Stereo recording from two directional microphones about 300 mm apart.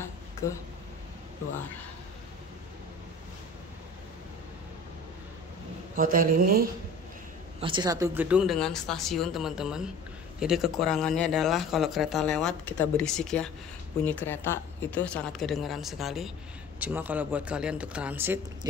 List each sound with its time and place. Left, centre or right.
0.0 s a sound: centre
5.9 s a man's voice: right
7.6 s speech: centre